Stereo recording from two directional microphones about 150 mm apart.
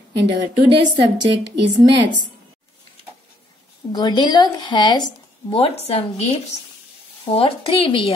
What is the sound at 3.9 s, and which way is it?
Speech, 30° left (ahead or behind).